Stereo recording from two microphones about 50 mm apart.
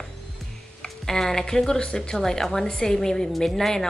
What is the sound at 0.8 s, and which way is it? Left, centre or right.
A woman's voice, centre.